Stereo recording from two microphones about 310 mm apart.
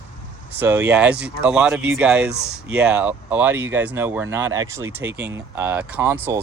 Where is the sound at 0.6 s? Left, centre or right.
Centre.